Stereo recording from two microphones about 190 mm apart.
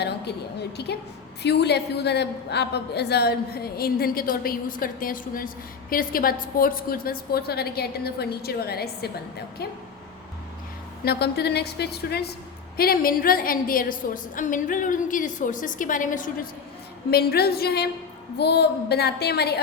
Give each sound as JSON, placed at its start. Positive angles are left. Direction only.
{"t": 0.8, "sound": "a woman's voice", "side_deg": 60}
{"t": 11.0, "sound": "a woman's voice", "side_deg": 55}
{"t": 17.1, "sound": "a woman's voice", "side_deg": 55}